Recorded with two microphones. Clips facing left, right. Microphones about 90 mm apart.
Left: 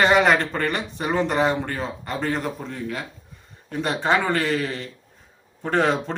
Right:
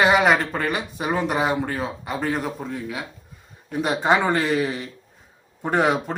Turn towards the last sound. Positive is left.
turn(degrees=-10)  # may be behind; listen again after turning